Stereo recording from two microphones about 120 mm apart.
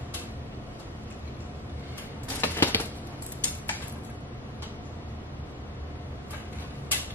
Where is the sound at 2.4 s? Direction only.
20° left (ahead or behind).